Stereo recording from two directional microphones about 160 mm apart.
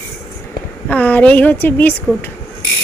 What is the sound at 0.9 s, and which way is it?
Speech, 10° left (ahead or behind).